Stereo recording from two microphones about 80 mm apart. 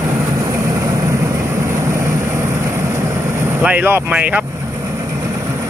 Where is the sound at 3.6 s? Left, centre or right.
Right.